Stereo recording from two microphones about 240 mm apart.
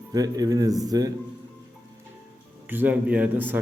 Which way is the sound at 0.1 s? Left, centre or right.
Centre.